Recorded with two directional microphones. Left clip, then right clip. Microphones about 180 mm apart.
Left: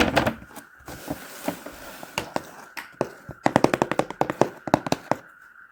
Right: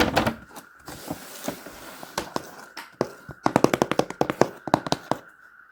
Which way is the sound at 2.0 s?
5° left (ahead or behind).